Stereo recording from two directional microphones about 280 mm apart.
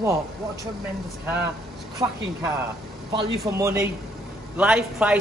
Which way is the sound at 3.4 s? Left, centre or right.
Centre.